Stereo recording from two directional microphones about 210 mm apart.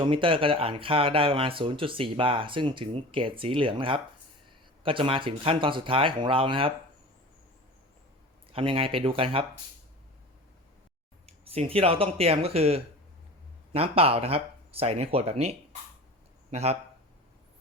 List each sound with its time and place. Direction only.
0.0 s speech: 25° right (ahead or behind)
8.5 s speech: 25° right (ahead or behind)
11.3 s speech: 30° right (ahead or behind)